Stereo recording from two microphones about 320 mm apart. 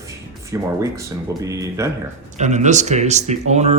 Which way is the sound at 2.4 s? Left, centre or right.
Right.